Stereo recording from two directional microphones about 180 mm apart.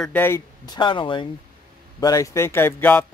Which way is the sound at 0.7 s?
25° left (ahead or behind).